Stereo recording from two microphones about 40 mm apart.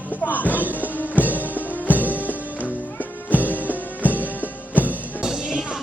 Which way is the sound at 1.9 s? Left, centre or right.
Right.